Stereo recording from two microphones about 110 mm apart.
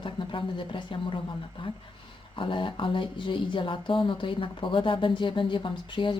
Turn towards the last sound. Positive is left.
turn(degrees=50)  # may be behind; listen again after turning